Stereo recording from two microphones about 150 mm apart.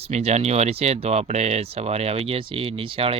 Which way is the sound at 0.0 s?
45° right (ahead or behind).